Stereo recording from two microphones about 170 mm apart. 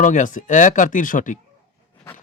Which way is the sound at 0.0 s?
50° left (ahead or behind).